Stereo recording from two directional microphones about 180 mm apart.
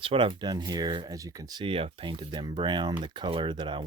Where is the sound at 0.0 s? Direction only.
30° right (ahead or behind).